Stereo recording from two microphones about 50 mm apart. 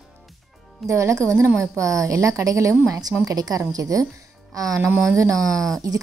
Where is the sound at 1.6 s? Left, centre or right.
Right.